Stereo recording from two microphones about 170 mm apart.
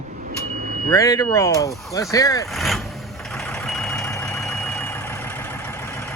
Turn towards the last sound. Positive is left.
turn(degrees=15)  # may be behind; listen again after turning